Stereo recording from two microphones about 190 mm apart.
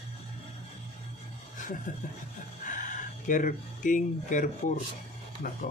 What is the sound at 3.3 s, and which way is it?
Speech, 45° left (ahead or behind).